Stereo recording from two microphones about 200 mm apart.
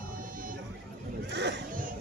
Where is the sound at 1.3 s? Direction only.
60° right (ahead or behind).